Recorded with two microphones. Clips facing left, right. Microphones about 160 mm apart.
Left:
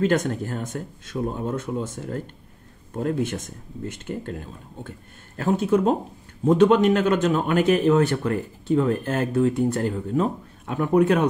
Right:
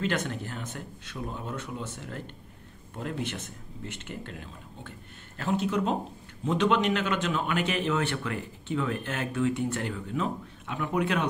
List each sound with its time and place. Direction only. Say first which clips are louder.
0.0 s speech: left 8 dB; 45° left (ahead or behind)